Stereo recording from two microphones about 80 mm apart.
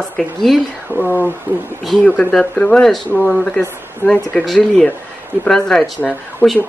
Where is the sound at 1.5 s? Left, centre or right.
Right.